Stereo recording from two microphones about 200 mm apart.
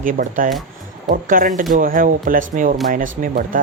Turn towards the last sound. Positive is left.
turn(degrees=-45)  # may be behind; listen again after turning